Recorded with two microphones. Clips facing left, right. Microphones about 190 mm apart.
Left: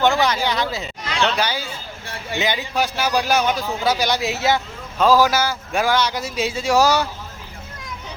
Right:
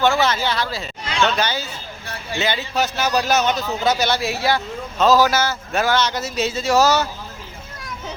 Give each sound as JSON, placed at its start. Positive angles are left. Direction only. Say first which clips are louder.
{"t": 0.0, "sound": "a man's voice", "louder": "even", "side_deg": 15}